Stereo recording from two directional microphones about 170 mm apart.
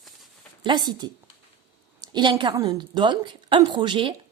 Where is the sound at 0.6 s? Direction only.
25° right (ahead or behind).